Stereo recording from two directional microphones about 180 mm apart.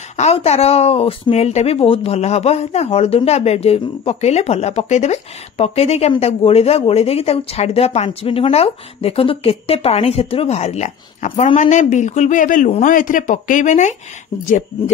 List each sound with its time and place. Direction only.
0.2 s a woman's voice: 35° left (ahead or behind)